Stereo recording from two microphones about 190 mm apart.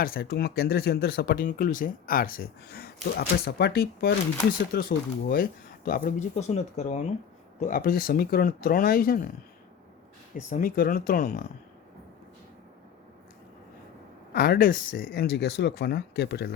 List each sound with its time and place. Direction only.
0.0 s speech: 50° left (ahead or behind)
7.6 s speech: 50° left (ahead or behind)
10.5 s speech: 45° left (ahead or behind)
14.3 s speech: 55° left (ahead or behind)